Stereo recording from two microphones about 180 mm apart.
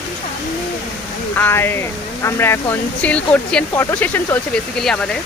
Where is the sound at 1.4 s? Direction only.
15° left (ahead or behind).